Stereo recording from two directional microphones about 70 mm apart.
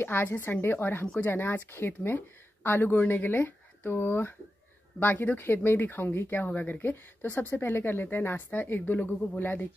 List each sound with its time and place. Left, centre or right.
0.0 s a woman's voice: left